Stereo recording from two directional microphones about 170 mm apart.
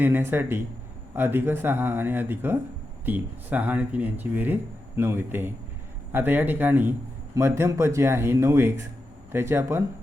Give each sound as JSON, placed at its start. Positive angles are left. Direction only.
{"t": 0.0, "sound": "speech", "side_deg": -10}